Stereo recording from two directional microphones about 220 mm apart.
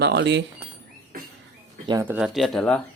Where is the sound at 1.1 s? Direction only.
40° right (ahead or behind).